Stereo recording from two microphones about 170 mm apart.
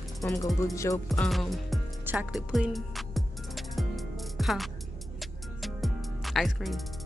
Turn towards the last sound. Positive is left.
turn(degrees=0)  # may be behind; listen again after turning